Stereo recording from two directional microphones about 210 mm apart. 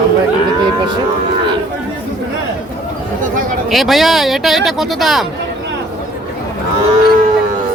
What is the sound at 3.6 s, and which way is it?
Speech, centre (ahead or behind).